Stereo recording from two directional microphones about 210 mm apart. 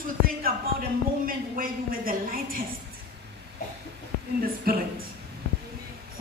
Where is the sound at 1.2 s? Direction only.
40° right (ahead or behind).